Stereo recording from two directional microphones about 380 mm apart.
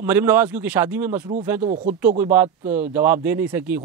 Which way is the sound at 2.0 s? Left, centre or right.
Centre.